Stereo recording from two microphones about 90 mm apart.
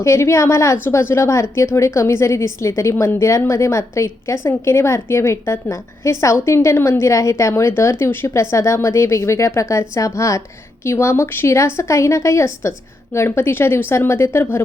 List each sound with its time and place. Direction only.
0.0 s a woman's voice: 30° left (ahead or behind)